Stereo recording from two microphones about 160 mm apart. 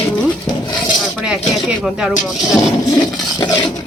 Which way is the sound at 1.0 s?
5° right (ahead or behind).